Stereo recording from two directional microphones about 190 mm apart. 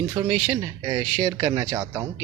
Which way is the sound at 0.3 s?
30° right (ahead or behind).